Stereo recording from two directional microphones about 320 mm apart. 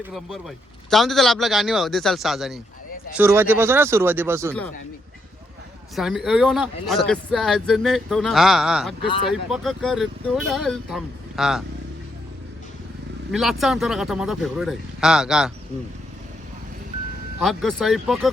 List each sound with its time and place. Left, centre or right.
0.1 s speech: centre
6.0 s speech: centre
13.3 s speech: centre
17.4 s speech: centre